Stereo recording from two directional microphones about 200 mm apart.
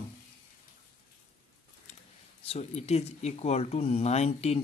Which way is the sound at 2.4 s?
30° left (ahead or behind).